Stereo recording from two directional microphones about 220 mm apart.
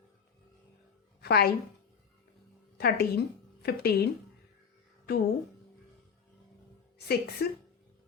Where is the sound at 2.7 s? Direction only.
45° left (ahead or behind).